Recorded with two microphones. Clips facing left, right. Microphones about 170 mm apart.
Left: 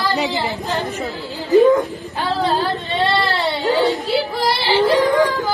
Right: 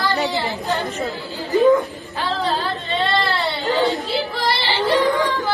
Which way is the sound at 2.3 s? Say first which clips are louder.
Left 4 dB; 35° left (ahead or behind).